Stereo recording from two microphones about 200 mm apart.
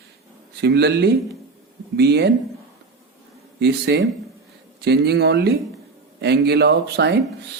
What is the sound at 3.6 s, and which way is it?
Speech, 55° right (ahead or behind).